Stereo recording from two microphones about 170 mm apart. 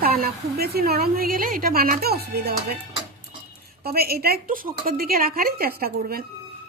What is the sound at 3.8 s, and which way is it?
A woman's voice, 65° right (ahead or behind).